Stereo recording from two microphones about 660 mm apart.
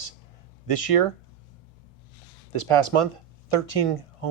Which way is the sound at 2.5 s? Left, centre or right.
Left.